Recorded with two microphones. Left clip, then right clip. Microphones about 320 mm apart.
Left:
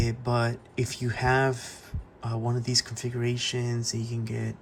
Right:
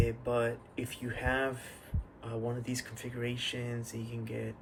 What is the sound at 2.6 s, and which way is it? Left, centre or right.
Speech, centre.